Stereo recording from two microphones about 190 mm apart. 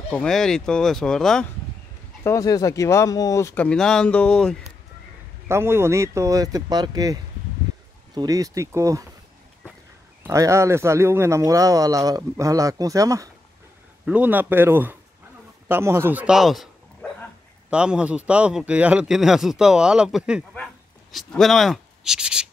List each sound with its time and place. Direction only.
0.1 s a man's voice: 5° left (ahead or behind)
2.2 s speech: 20° left (ahead or behind)
5.5 s speech: 15° right (ahead or behind)
10.2 s a man's voice: 15° right (ahead or behind)
20.5 s a sound: centre (ahead or behind)